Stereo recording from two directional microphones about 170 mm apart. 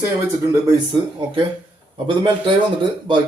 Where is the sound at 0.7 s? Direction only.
25° right (ahead or behind).